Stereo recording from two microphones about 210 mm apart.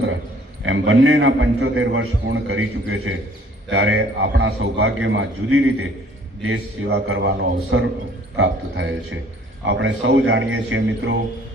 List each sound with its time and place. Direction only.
0.6 s a man's voice: 70° right (ahead or behind)
6.4 s a man's voice: 65° right (ahead or behind)
7.7 s a man's voice: 70° right (ahead or behind)